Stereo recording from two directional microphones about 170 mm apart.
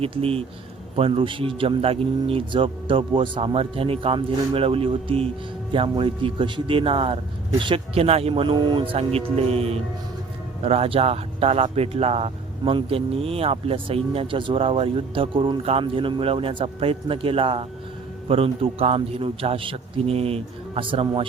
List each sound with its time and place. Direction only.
0.0 s speech: 35° right (ahead or behind)